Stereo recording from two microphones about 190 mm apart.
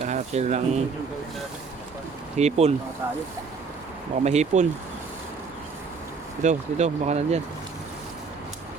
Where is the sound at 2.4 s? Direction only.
35° right (ahead or behind).